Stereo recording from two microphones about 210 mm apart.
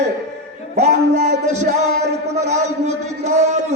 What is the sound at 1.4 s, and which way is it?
A man's voice, 35° right (ahead or behind).